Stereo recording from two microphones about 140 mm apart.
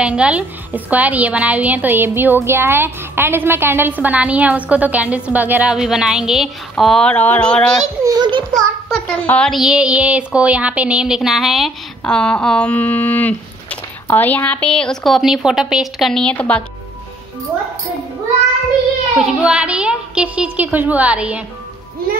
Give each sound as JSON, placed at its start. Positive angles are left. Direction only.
{"t": 0.0, "sound": "a woman's voice", "side_deg": -10}
{"t": 8.0, "sound": "a child's voice", "side_deg": -30}
{"t": 8.5, "sound": "a child's voice", "side_deg": 0}
{"t": 9.5, "sound": "a woman's voice", "side_deg": -5}
{"t": 19.4, "sound": "a woman's voice", "side_deg": -5}